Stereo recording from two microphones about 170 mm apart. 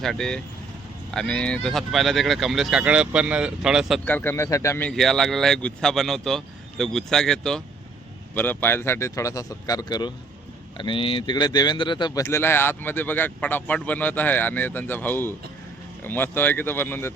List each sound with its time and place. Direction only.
0.0 s speech: 5° left (ahead or behind)
4.0 s speech: 10° left (ahead or behind)
4.9 s speech: centre (ahead or behind)